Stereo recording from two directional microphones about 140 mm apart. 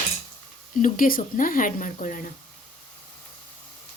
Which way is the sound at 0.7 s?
75° left (ahead or behind).